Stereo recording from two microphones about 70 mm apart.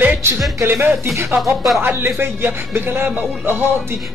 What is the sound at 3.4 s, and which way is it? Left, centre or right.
Music, right.